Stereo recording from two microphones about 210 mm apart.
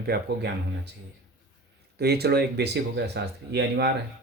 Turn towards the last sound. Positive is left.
turn(degrees=-50)  # may be behind; listen again after turning